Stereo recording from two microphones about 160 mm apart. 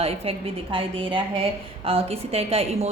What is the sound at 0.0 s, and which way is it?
Speech, 35° right (ahead or behind).